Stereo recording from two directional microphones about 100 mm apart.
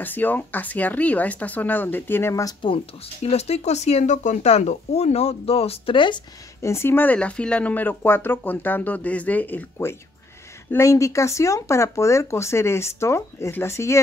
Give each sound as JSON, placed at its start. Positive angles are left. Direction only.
{"t": 0.0, "sound": "speech", "side_deg": 20}
{"t": 2.6, "sound": "speech", "side_deg": 75}
{"t": 6.6, "sound": "speech", "side_deg": 25}